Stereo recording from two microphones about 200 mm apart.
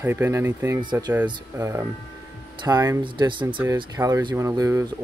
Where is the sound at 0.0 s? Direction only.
10° right (ahead or behind).